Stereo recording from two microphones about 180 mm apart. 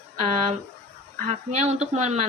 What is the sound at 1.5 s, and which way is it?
Speech, 40° right (ahead or behind).